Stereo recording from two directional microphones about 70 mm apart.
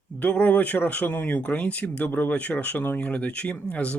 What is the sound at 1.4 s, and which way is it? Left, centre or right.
Speech, centre.